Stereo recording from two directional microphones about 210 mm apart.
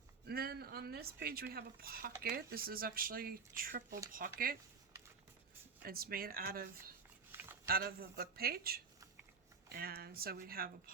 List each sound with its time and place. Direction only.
0.3 s speech: 45° right (ahead or behind)
5.8 s speech: 45° right (ahead or behind)
7.7 s speech: 45° right (ahead or behind)